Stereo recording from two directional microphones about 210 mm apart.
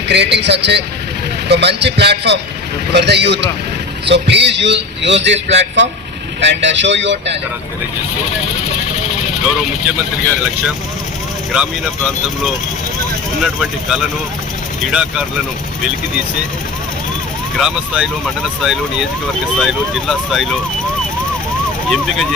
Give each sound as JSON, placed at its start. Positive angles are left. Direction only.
{"t": 0.1, "sound": "a man's voice", "side_deg": -55}
{"t": 13.4, "sound": "speech", "side_deg": 0}
{"t": 17.6, "sound": "speech", "side_deg": -5}
{"t": 21.8, "sound": "speech", "side_deg": 0}